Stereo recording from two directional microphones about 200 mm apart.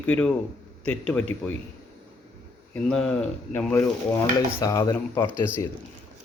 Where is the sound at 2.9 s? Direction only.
5° left (ahead or behind).